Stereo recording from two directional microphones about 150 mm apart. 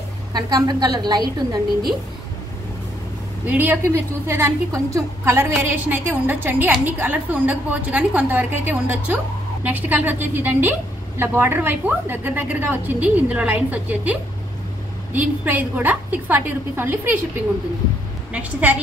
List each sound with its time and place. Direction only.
0.3 s a woman's voice: 25° right (ahead or behind)
3.4 s a woman's voice: 10° right (ahead or behind)
15.1 s a woman's voice: 10° right (ahead or behind)
18.3 s a woman's voice: 10° right (ahead or behind)